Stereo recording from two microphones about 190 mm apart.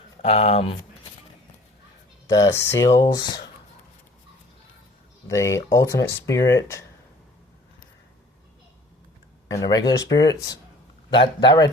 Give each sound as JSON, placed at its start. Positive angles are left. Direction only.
{"t": 0.2, "sound": "speech", "side_deg": 35}
{"t": 2.2, "sound": "speech", "side_deg": 20}
{"t": 5.3, "sound": "speech", "side_deg": 15}
{"t": 9.5, "sound": "speech", "side_deg": 20}